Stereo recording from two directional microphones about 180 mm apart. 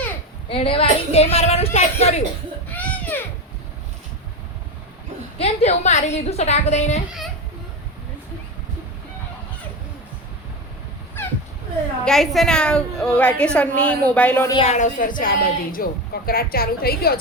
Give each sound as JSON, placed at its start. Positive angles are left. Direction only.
{"t": 0.4, "sound": "a woman's voice", "side_deg": 30}
{"t": 2.7, "sound": "baby cry", "side_deg": 10}
{"t": 5.4, "sound": "a woman's voice", "side_deg": 35}
{"t": 12.0, "sound": "a woman's voice", "side_deg": 0}
{"t": 14.5, "sound": "a woman's voice", "side_deg": 35}